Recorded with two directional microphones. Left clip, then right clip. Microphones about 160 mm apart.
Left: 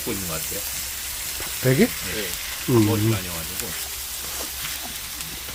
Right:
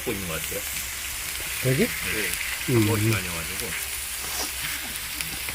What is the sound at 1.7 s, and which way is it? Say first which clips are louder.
Speech: left 5 dB; 35° left (ahead or behind).